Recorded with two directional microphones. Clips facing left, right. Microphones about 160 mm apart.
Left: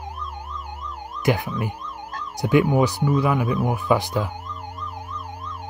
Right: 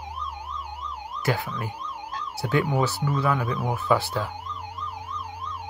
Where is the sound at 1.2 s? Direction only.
15° left (ahead or behind).